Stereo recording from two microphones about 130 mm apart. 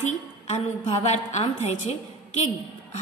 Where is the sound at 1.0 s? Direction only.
60° left (ahead or behind).